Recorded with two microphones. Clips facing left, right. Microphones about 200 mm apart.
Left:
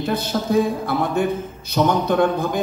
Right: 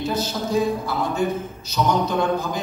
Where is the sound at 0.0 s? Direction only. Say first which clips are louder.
Left 2 dB; 55° left (ahead or behind).